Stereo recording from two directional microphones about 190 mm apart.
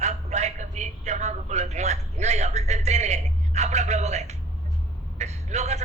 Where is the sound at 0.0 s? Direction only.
35° right (ahead or behind).